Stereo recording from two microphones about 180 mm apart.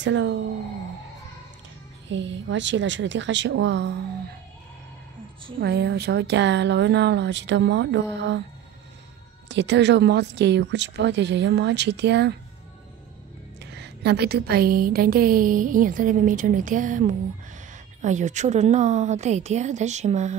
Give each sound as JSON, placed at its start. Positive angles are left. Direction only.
{"t": 0.0, "sound": "a woman's voice", "side_deg": -90}
{"t": 2.0, "sound": "a woman's voice", "side_deg": -90}
{"t": 5.6, "sound": "speech", "side_deg": -65}
{"t": 9.5, "sound": "speech", "side_deg": -80}
{"t": 13.6, "sound": "a woman's voice", "side_deg": -70}